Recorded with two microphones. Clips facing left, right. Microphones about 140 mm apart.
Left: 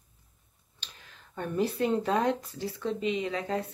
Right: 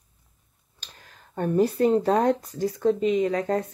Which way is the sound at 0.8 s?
45° right (ahead or behind).